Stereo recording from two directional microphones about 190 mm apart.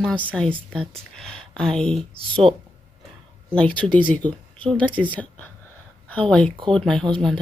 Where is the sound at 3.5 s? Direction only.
5° left (ahead or behind).